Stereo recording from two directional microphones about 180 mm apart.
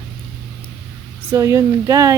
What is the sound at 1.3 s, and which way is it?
Speech, 15° right (ahead or behind).